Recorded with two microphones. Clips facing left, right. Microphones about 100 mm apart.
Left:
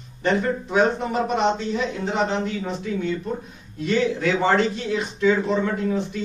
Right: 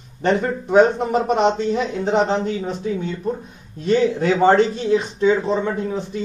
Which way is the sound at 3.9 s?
40° right (ahead or behind).